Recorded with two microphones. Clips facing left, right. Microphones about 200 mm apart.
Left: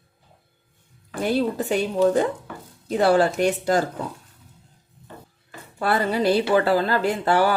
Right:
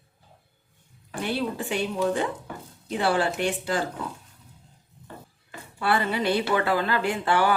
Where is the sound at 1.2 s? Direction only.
40° left (ahead or behind).